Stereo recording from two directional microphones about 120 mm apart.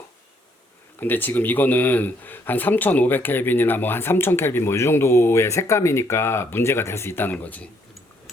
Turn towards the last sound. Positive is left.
turn(degrees=10)  # may be behind; listen again after turning